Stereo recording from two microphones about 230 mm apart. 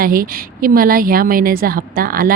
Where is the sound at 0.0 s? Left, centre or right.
Right.